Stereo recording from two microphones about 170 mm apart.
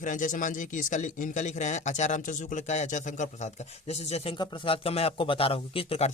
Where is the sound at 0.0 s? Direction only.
50° left (ahead or behind).